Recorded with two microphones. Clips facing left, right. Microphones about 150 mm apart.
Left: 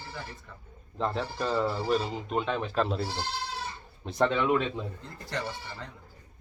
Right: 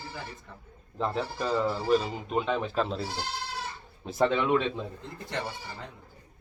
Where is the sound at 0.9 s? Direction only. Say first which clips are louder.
Even; 5° right (ahead or behind).